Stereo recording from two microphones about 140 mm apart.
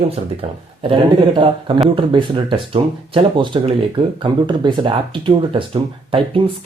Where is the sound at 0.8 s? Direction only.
35° right (ahead or behind).